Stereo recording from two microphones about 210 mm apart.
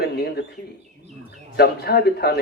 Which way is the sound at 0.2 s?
50° left (ahead or behind).